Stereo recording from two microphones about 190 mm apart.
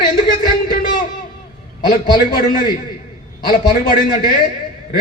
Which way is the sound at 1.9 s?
45° left (ahead or behind).